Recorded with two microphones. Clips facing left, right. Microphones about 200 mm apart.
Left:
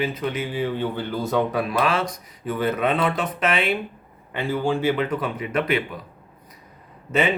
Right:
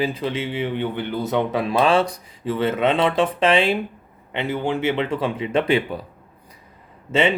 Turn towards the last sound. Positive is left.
turn(degrees=-25)  # may be behind; listen again after turning